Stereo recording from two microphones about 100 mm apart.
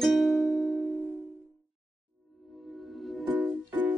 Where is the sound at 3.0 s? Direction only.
Centre (ahead or behind).